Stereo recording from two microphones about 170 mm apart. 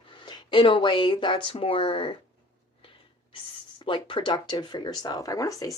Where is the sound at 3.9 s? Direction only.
30° left (ahead or behind).